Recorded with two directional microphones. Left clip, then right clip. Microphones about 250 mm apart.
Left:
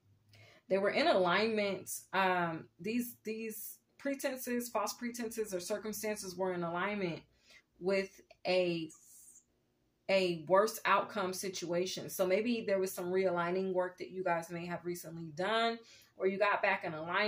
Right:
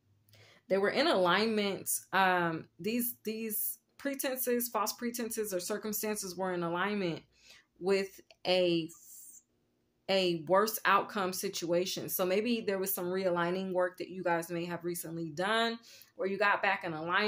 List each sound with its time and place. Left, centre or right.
0.7 s speech: right
10.0 s speech: right